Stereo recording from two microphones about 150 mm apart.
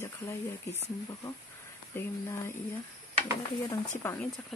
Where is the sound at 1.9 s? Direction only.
15° left (ahead or behind).